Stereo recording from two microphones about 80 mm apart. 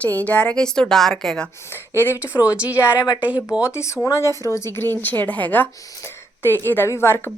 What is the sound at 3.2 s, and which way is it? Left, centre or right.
Speech, centre.